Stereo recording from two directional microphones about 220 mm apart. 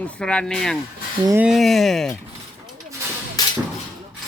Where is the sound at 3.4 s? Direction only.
15° left (ahead or behind).